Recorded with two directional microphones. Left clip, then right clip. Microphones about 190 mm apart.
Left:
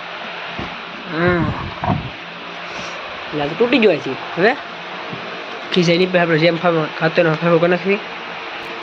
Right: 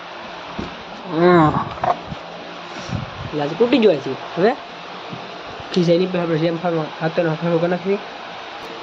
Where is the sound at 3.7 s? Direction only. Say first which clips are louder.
Left 1 dB; 20° right (ahead or behind).